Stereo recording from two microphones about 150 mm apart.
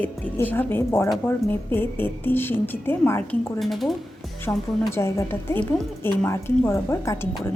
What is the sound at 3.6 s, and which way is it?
A woman's voice, centre (ahead or behind).